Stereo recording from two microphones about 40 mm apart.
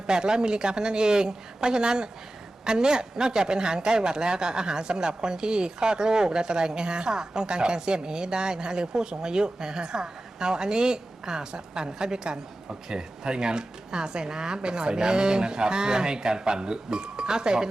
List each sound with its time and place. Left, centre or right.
0.1 s a man's voice: centre